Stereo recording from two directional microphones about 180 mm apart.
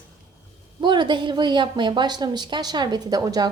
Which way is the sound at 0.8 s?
25° right (ahead or behind).